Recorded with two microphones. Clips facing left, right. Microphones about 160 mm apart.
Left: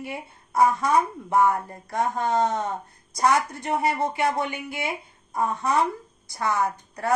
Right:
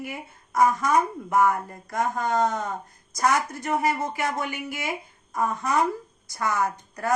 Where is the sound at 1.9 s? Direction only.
Centre (ahead or behind).